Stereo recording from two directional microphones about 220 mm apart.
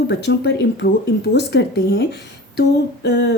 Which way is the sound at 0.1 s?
50° left (ahead or behind).